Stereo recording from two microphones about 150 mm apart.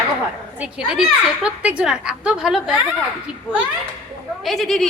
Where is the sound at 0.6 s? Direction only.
5° right (ahead or behind).